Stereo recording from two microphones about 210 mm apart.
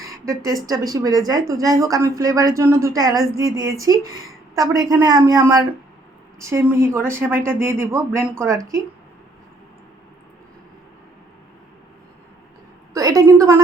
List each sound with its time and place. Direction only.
0.0 s a sound: 15° right (ahead or behind)
0.6 s speech: 15° right (ahead or behind)
12.9 s a woman's voice: 15° right (ahead or behind)